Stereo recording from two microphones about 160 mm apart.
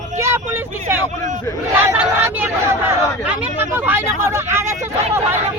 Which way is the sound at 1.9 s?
15° right (ahead or behind).